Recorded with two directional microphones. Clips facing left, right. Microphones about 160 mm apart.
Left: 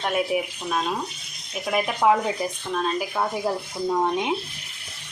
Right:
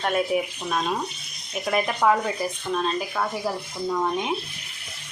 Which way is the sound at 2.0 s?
15° left (ahead or behind).